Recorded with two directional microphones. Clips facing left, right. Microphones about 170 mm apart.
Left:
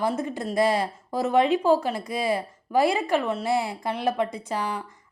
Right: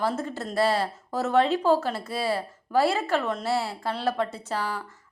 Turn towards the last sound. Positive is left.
turn(degrees=15)  # may be behind; listen again after turning